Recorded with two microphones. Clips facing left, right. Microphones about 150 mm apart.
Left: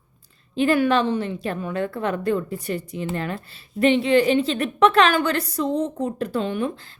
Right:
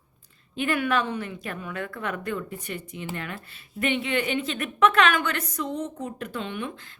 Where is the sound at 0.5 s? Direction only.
30° left (ahead or behind).